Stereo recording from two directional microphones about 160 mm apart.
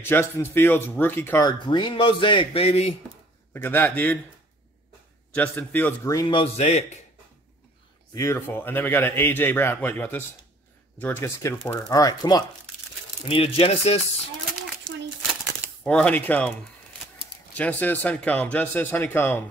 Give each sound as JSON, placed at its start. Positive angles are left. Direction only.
{"t": 0.0, "sound": "a man's voice", "side_deg": 15}
{"t": 1.4, "sound": "speech", "side_deg": 30}
{"t": 3.5, "sound": "a man's voice", "side_deg": 10}
{"t": 5.3, "sound": "a man's voice", "side_deg": 10}
{"t": 6.1, "sound": "speech", "side_deg": 30}
{"t": 8.1, "sound": "a man's voice", "side_deg": 20}
{"t": 13.3, "sound": "speech", "side_deg": 35}
{"t": 15.8, "sound": "a man's voice", "side_deg": 10}
{"t": 17.6, "sound": "a man's voice", "side_deg": 10}